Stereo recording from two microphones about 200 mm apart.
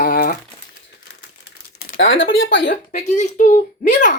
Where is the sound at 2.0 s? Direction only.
70° left (ahead or behind).